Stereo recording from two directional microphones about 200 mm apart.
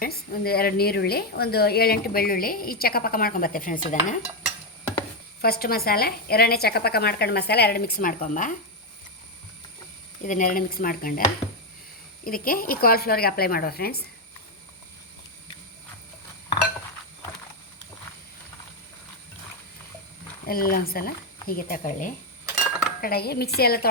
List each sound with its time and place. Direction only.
0.0 s a woman's voice: 50° left (ahead or behind)
5.4 s a woman's voice: 50° left (ahead or behind)
10.2 s a woman's voice: 40° left (ahead or behind)
20.5 s a woman's voice: 45° left (ahead or behind)